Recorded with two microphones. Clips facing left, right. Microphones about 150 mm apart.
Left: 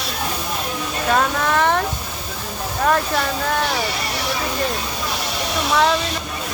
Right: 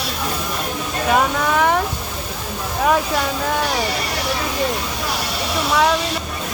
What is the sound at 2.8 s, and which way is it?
Speech, 5° right (ahead or behind).